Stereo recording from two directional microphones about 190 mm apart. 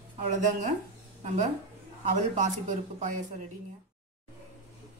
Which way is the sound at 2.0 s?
40° right (ahead or behind).